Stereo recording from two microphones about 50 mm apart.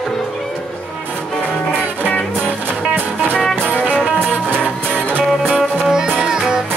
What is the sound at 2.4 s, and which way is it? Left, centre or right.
Music, right.